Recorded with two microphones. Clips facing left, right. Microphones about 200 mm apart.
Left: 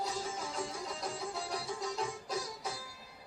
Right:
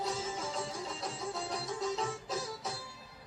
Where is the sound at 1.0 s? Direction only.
10° left (ahead or behind).